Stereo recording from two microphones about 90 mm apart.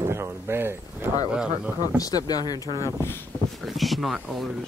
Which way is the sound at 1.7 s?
45° left (ahead or behind).